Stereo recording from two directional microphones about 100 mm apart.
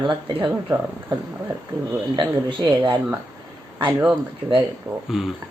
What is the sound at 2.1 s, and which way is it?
Speech, 50° right (ahead or behind).